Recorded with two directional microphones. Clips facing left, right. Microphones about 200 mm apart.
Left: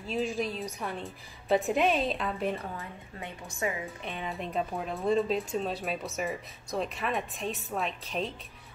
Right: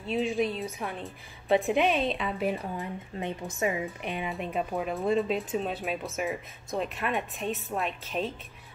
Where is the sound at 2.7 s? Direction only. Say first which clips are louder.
Right 6 dB; 20° right (ahead or behind).